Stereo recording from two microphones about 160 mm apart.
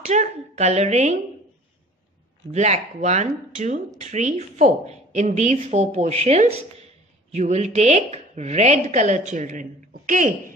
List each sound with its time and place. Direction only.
0.0 s a woman's voice: 45° right (ahead or behind)
2.5 s speech: 45° right (ahead or behind)